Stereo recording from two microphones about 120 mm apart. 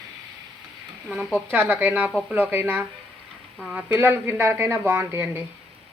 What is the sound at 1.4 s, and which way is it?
Speech, 15° right (ahead or behind).